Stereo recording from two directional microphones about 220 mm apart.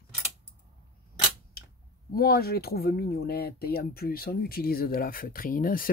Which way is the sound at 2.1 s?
45° left (ahead or behind).